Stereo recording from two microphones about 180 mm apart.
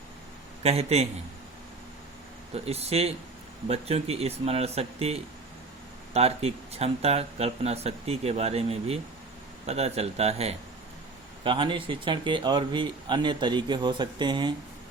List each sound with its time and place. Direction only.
0.6 s speech: 35° right (ahead or behind)
2.6 s speech: 35° right (ahead or behind)